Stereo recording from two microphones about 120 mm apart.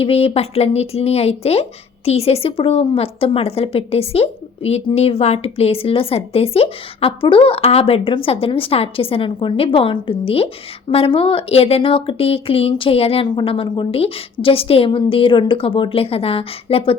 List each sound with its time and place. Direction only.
0.0 s a woman's voice: 55° left (ahead or behind)